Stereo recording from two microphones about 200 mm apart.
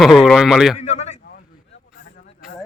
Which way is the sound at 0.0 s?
Centre (ahead or behind).